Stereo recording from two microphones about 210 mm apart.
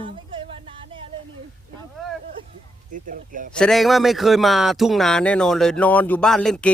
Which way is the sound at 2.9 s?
40° right (ahead or behind).